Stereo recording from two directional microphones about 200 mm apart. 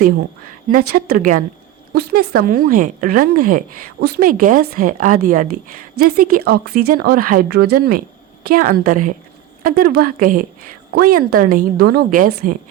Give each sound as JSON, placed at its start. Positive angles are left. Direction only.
{"t": 0.9, "sound": "a woman's voice", "side_deg": -50}
{"t": 1.9, "sound": "a woman's voice", "side_deg": -50}